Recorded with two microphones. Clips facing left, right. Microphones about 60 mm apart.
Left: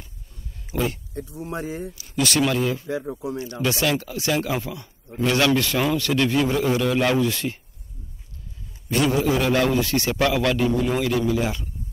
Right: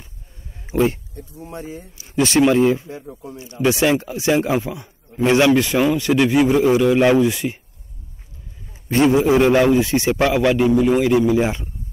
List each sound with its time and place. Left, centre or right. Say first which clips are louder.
0.7 s a sound: right 7 dB; right
1.1 s speech: left 3 dB; left
2.0 s a man's voice: right 7 dB; right
2.9 s speech: left 6 dB; left
3.6 s a man's voice: right 7 dB; right
8.8 s a man's voice: right 6 dB; right